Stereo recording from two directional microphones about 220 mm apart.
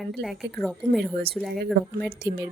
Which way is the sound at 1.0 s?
45° right (ahead or behind).